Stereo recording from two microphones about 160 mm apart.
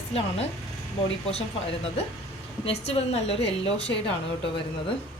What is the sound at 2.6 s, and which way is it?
A woman's voice, 40° left (ahead or behind).